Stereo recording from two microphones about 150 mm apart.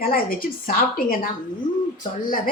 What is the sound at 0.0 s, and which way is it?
A woman's voice, 75° left (ahead or behind).